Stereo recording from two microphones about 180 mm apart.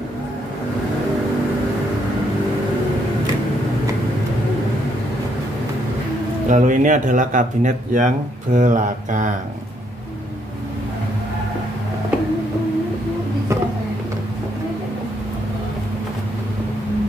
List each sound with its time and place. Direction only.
6.5 s speech: 45° right (ahead or behind)